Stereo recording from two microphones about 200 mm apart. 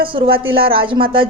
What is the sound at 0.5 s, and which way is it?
Speech, 25° right (ahead or behind).